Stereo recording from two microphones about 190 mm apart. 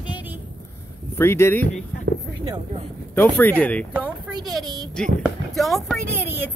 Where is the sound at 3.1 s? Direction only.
10° left (ahead or behind).